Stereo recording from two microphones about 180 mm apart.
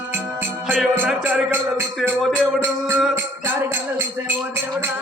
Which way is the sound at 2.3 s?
15° right (ahead or behind).